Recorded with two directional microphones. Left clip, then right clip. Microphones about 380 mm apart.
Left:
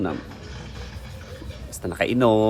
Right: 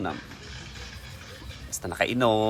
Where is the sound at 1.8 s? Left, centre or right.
Centre.